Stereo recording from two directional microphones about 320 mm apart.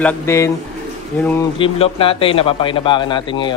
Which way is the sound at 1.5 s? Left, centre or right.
Centre.